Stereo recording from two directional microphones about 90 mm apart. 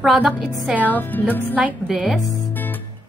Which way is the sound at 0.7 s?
20° left (ahead or behind).